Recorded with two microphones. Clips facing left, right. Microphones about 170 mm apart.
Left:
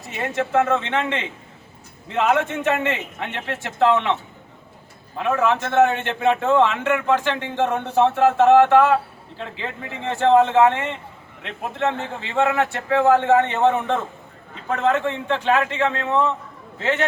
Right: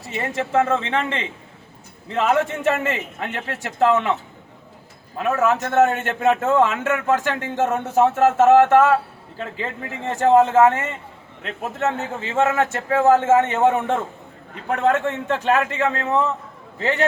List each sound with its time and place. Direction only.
0.9 s speech: 30° right (ahead or behind)
5.2 s speech: 45° right (ahead or behind)